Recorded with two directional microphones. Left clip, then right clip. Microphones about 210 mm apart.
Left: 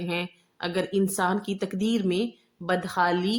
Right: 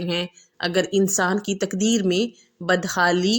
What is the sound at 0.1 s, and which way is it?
Speech, 25° right (ahead or behind).